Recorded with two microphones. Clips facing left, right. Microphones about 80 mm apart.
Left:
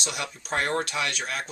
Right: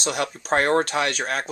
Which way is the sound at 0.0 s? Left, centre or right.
Right.